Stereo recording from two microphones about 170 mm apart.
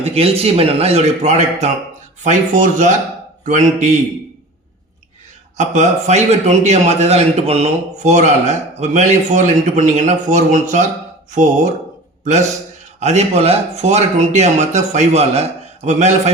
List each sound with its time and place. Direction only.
0.0 s a man's voice: 35° right (ahead or behind)
5.5 s a man's voice: 45° right (ahead or behind)
13.0 s speech: 40° right (ahead or behind)